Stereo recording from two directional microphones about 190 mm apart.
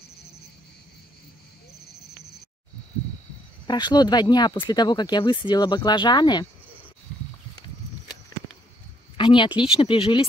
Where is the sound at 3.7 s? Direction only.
20° left (ahead or behind).